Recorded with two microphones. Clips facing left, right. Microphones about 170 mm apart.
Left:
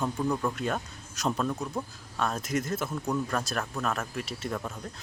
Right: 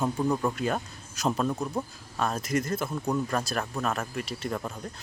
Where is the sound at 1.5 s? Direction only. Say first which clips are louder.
Right 2 dB; 15° right (ahead or behind).